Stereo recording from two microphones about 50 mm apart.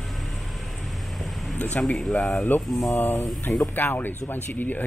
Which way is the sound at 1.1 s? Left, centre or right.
Centre.